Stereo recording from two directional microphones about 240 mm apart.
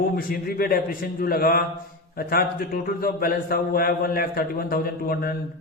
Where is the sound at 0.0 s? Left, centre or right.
Left.